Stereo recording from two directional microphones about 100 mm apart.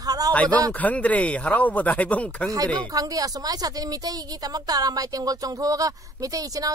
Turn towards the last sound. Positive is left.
turn(degrees=-35)  # may be behind; listen again after turning